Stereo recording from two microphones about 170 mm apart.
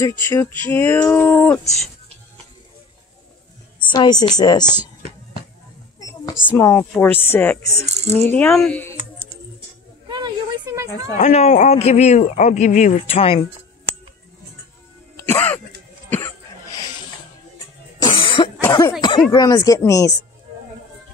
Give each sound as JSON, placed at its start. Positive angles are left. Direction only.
{"t": 0.2, "sound": "speech", "side_deg": 15}
{"t": 3.8, "sound": "a woman's voice", "side_deg": 25}
{"t": 6.5, "sound": "speech", "side_deg": 15}
{"t": 7.8, "sound": "speech", "side_deg": -40}
{"t": 8.3, "sound": "speech", "side_deg": 5}
{"t": 10.0, "sound": "a sound", "side_deg": -25}
{"t": 11.1, "sound": "a man's voice", "side_deg": 40}
{"t": 15.2, "sound": "music", "side_deg": 10}
{"t": 18.0, "sound": "cough", "side_deg": 30}
{"t": 18.6, "sound": "a sound", "side_deg": 20}